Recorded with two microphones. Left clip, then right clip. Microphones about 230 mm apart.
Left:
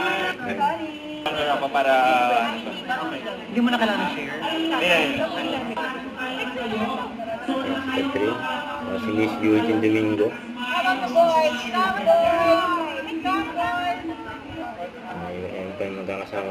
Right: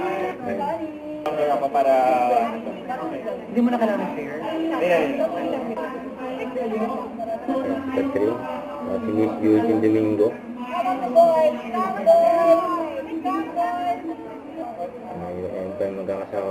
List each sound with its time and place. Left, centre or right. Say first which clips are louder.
0.0 s a sound: left 1 dB; centre
1.2 s speech: right 2 dB; left
6.4 s chatter: right 3 dB; centre
7.5 s speech: right 1 dB; left
9.1 s speech: right 1 dB; left
9.6 s speech: right 1 dB; left
10.7 s a sound: left 1 dB; centre